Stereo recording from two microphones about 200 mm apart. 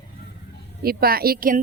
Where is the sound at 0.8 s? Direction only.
50° right (ahead or behind).